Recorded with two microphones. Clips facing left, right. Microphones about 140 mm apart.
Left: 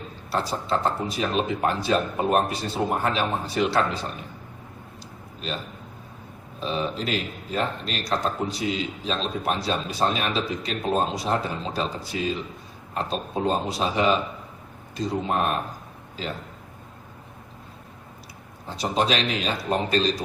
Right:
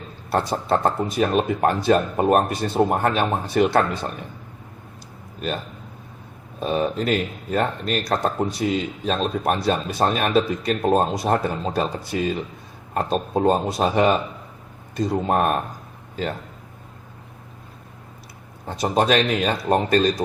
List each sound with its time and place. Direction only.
0.3 s speech: 50° right (ahead or behind)
6.6 s speech: 50° right (ahead or behind)
18.7 s speech: 50° right (ahead or behind)